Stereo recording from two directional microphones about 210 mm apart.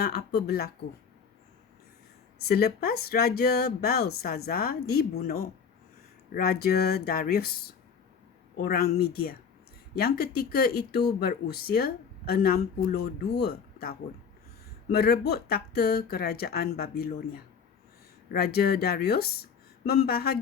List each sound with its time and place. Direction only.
0.0 s speech: 50° left (ahead or behind)
2.4 s speech: 45° left (ahead or behind)
14.9 s speech: 45° left (ahead or behind)